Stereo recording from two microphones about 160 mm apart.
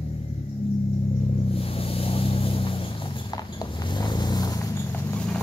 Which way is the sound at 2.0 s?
35° left (ahead or behind).